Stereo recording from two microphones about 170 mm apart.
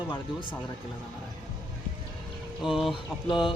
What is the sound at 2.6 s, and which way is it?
Speech, centre (ahead or behind).